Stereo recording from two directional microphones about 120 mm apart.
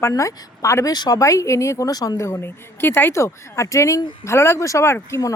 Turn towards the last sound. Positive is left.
turn(degrees=20)  # may be behind; listen again after turning